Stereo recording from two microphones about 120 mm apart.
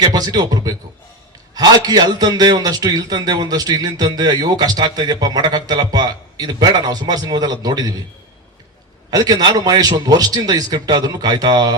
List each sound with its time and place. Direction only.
0.0 s a man's voice: 35° right (ahead or behind)
9.0 s a man's voice: 35° right (ahead or behind)